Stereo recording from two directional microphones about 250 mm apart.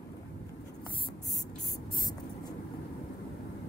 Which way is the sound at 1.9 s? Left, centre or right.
Centre.